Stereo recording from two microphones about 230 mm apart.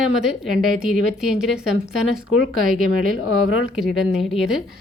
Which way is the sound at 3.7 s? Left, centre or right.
Centre.